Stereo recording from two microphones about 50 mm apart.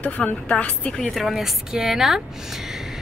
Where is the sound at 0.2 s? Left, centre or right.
Left.